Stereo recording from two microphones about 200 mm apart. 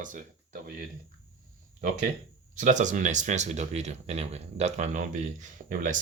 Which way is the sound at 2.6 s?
40° right (ahead or behind).